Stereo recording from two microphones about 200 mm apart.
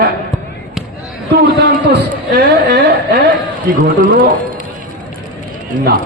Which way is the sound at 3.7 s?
40° right (ahead or behind).